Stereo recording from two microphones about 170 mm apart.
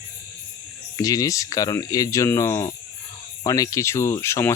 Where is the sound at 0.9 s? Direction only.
20° left (ahead or behind).